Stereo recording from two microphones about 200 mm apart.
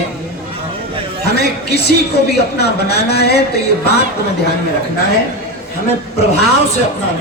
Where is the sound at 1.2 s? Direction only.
55° left (ahead or behind).